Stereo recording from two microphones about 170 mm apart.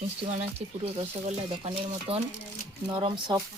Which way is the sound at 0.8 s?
35° right (ahead or behind).